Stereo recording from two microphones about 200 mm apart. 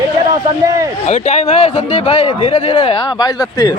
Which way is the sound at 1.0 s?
35° left (ahead or behind).